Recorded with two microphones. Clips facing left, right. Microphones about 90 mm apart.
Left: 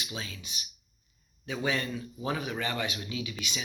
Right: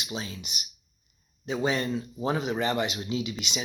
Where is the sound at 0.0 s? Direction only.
25° right (ahead or behind).